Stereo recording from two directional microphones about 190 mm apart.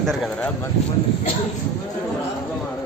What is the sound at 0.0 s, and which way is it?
Speech, centre (ahead or behind).